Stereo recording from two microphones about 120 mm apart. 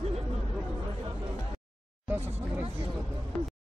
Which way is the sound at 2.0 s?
15° right (ahead or behind).